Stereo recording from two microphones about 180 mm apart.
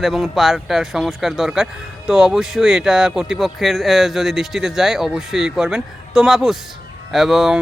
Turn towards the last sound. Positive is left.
turn(degrees=0)  # may be behind; listen again after turning